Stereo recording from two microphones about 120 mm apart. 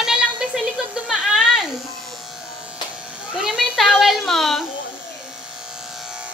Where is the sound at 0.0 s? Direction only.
5° right (ahead or behind).